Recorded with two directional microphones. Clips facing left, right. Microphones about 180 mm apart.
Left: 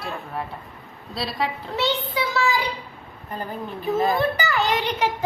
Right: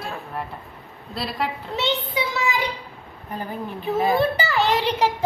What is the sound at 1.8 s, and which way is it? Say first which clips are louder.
Speech: left 1 dB; 20° right (ahead or behind).